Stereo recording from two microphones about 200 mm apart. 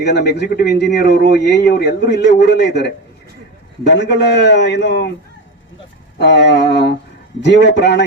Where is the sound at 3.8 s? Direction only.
60° left (ahead or behind).